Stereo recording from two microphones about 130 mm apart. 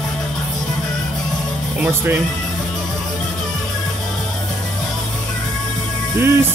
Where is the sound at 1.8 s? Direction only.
15° right (ahead or behind).